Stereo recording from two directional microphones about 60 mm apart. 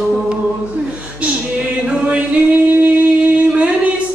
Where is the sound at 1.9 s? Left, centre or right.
Right.